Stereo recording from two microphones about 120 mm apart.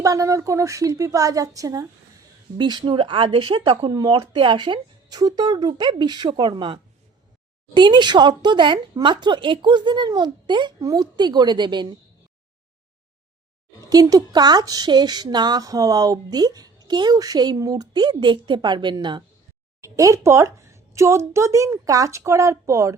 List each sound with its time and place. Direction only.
0.0 s a woman's voice: 25° right (ahead or behind)
13.9 s speech: 30° right (ahead or behind)
19.8 s a woman's voice: 25° right (ahead or behind)